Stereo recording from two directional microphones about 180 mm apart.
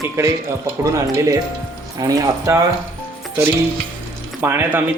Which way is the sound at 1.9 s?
20° right (ahead or behind).